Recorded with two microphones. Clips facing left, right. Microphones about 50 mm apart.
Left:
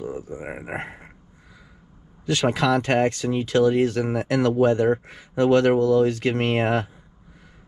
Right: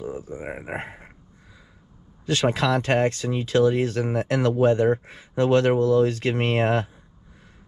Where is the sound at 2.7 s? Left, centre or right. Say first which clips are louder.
Left 1 dB; left.